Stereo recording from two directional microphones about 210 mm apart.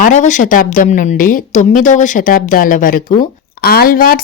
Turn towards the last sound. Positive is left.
turn(degrees=45)  # may be behind; listen again after turning